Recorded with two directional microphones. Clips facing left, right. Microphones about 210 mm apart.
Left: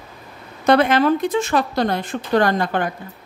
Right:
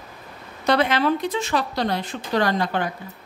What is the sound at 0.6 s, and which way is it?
Speech, 50° left (ahead or behind).